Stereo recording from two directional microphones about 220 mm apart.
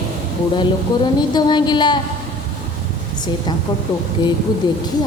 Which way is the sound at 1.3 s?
20° left (ahead or behind).